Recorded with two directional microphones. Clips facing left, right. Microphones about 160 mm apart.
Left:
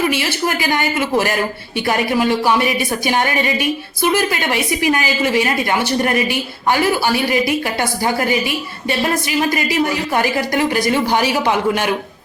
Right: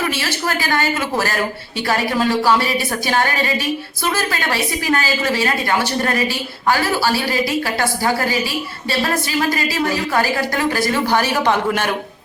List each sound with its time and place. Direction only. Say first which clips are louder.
0.1 s a woman's voice: left 3 dB; 15° left (ahead or behind)